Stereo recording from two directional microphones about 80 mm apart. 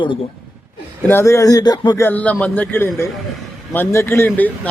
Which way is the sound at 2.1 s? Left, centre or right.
Centre.